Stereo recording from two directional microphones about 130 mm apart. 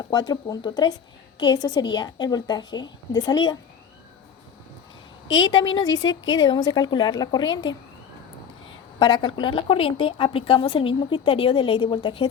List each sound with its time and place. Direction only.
0.0 s a woman's voice: 35° left (ahead or behind)
5.4 s a woman's voice: 35° left (ahead or behind)
9.0 s speech: 35° left (ahead or behind)